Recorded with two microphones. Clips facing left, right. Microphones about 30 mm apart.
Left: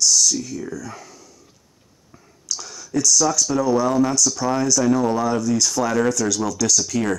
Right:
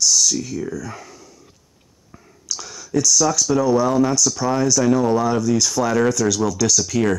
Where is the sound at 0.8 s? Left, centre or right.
Centre.